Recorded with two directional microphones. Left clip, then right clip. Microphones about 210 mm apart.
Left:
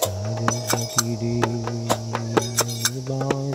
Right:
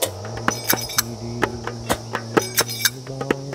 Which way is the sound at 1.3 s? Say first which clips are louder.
Right 3 dB; 15° right (ahead or behind).